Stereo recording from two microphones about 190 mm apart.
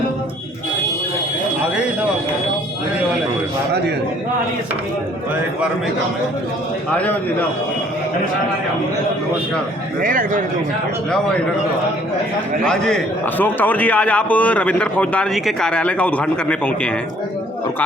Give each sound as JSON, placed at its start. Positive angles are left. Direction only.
{"t": 6.9, "sound": "speech", "side_deg": 5}
{"t": 10.0, "sound": "a man's voice", "side_deg": -45}
{"t": 12.6, "sound": "a man's voice", "side_deg": 5}